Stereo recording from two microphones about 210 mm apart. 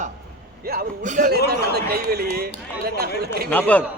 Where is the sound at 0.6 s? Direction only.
45° right (ahead or behind).